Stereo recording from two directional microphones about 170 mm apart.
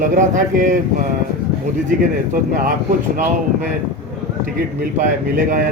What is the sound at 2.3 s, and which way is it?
Speech, 50° right (ahead or behind).